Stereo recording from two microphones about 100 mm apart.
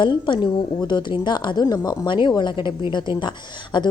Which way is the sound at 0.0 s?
55° left (ahead or behind).